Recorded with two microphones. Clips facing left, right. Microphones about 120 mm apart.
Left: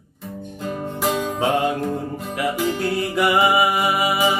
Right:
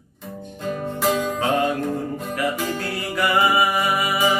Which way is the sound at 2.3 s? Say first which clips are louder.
Left 3 dB; 20° left (ahead or behind).